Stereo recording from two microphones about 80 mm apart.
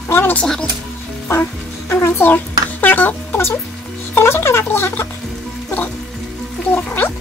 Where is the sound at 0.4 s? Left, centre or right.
Centre.